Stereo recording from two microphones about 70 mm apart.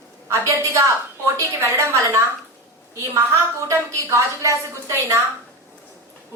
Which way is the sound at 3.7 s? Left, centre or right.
Right.